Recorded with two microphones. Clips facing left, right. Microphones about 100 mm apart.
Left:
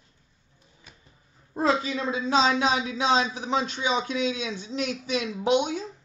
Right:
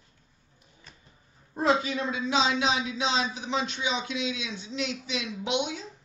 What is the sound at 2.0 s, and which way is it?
Speech, 35° left (ahead or behind).